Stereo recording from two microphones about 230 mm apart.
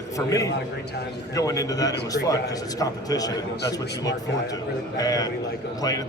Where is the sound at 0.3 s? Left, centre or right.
Centre.